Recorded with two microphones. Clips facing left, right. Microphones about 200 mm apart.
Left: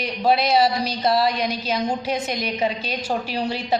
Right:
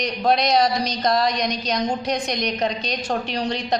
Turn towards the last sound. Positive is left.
turn(degrees=5)  # may be behind; listen again after turning